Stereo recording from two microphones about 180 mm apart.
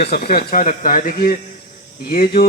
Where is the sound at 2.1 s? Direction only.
60° left (ahead or behind).